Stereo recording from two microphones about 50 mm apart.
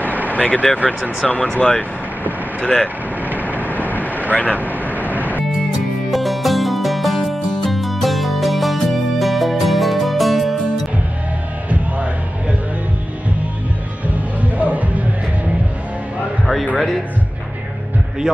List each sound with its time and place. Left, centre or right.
0.3 s speech: left
1.2 s speech: centre
1.6 s speech: left
3.4 s vehicle: left
6.0 s music: centre
14.0 s music: right
16.7 s a man's voice: centre